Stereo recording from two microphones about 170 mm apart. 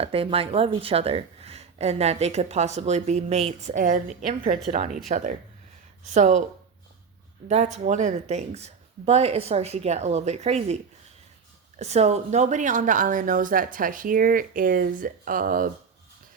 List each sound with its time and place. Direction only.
0.0 s a woman's voice: 35° right (ahead or behind)
7.4 s speech: 45° right (ahead or behind)
11.8 s a woman's voice: 40° right (ahead or behind)